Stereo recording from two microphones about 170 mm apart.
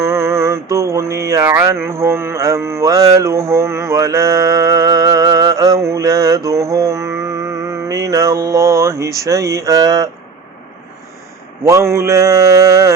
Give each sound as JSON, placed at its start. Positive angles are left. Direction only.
{"t": 0.0, "sound": "mantra", "side_deg": -15}
{"t": 11.6, "sound": "mantra", "side_deg": -15}